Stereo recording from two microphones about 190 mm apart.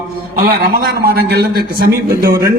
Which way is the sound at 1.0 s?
55° right (ahead or behind).